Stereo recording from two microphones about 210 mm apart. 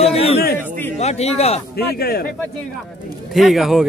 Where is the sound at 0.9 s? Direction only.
30° left (ahead or behind).